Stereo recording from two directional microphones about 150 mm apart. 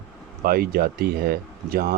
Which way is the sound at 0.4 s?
80° right.